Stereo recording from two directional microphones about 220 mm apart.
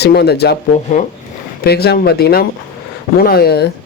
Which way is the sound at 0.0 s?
45° left (ahead or behind).